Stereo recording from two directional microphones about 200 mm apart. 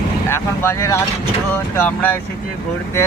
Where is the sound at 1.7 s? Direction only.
10° left (ahead or behind).